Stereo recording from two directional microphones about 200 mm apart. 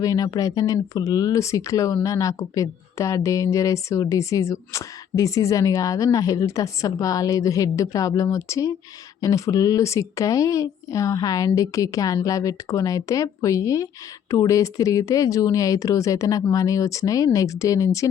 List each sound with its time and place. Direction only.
0.0 s speech: 20° left (ahead or behind)